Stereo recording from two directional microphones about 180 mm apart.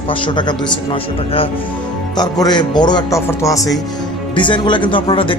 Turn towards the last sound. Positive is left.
turn(degrees=30)  # may be behind; listen again after turning